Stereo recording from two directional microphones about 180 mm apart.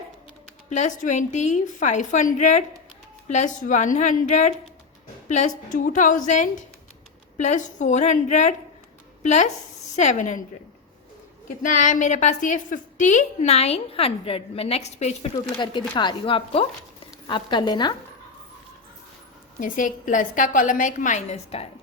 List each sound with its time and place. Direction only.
0.7 s a woman's voice: 40° left (ahead or behind)
11.6 s a woman's voice: 45° left (ahead or behind)
15.5 s speech: 25° left (ahead or behind)
19.5 s a woman's voice: 45° left (ahead or behind)